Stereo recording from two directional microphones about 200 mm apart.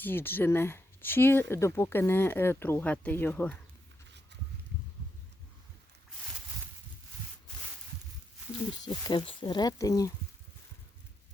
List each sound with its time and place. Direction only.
0.0 s speech: 10° left (ahead or behind)
8.8 s speech: 20° left (ahead or behind)